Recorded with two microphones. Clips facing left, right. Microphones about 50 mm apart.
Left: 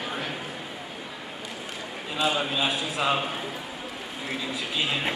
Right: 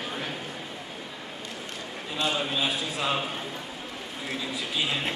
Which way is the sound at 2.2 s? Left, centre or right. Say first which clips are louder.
Left 2 dB; centre.